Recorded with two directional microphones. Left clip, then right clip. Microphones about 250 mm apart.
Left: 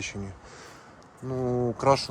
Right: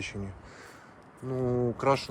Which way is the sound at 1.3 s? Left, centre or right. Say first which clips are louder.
Left 1 dB; centre.